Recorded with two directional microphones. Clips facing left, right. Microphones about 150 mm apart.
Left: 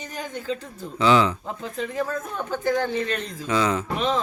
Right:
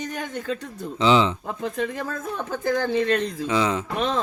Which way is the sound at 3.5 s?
20° right (ahead or behind).